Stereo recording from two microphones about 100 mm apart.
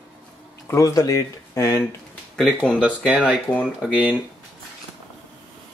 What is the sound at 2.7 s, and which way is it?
Speech, 10° right (ahead or behind).